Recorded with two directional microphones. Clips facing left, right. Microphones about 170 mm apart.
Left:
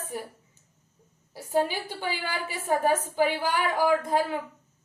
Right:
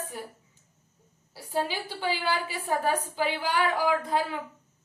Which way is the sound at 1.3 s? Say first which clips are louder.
Left 4 dB; 50° left (ahead or behind).